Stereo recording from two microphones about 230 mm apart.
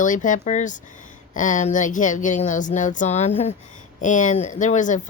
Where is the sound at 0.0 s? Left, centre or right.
Left.